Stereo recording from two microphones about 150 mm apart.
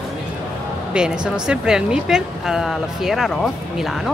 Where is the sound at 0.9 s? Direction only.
5° right (ahead or behind).